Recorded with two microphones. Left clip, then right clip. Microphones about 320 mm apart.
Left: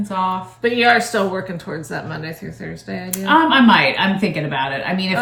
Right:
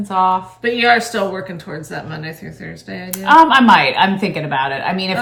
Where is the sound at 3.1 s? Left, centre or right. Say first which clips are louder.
Right 5 dB; centre.